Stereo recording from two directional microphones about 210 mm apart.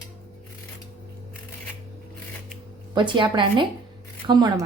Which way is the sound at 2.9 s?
20° right (ahead or behind).